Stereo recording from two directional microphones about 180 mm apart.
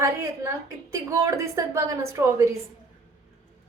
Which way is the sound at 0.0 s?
15° right (ahead or behind).